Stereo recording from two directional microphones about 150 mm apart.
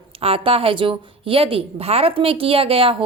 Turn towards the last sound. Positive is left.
turn(degrees=-35)  # may be behind; listen again after turning